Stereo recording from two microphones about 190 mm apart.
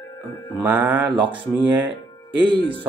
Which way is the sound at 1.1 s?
25° right (ahead or behind).